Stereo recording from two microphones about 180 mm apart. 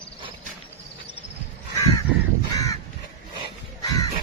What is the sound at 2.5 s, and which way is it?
Crow, 20° left (ahead or behind).